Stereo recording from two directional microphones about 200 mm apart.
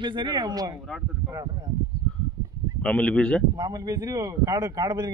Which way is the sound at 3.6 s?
20° right (ahead or behind).